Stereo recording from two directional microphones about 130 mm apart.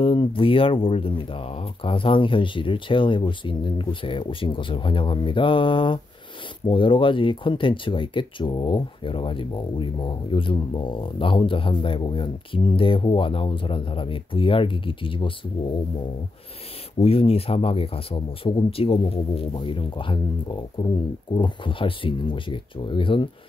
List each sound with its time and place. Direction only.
0.0 s speech: 40° left (ahead or behind)
17.0 s speech: 50° left (ahead or behind)